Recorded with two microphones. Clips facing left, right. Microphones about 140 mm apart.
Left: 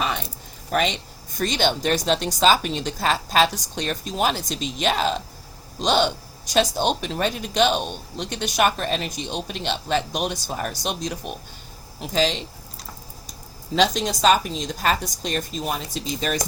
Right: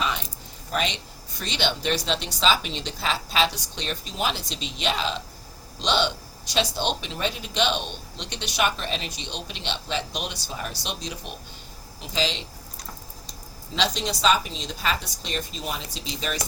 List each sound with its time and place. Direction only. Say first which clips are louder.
0.7 s speech: left 5 dB; 50° left (ahead or behind)
13.7 s speech: left 6 dB; 50° left (ahead or behind)